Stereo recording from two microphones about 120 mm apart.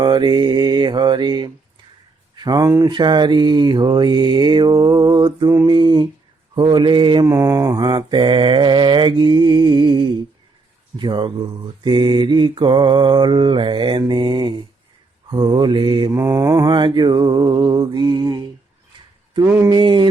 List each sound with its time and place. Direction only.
0.0 s mantra: 40° right (ahead or behind)
2.3 s speech: 35° right (ahead or behind)
2.9 s mantra: 40° right (ahead or behind)
7.3 s mantra: 25° right (ahead or behind)
16.1 s mantra: 25° right (ahead or behind)
19.5 s a sound: 20° right (ahead or behind)
19.7 s mantra: 40° right (ahead or behind)